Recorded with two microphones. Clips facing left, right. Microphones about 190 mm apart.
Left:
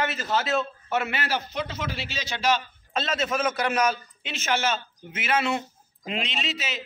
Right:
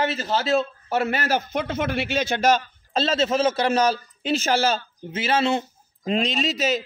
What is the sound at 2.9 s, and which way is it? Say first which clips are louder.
A man's voice: right 6 dB; 30° right (ahead or behind).